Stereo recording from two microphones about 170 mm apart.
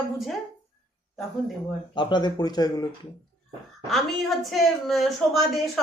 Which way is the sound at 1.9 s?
25° left (ahead or behind).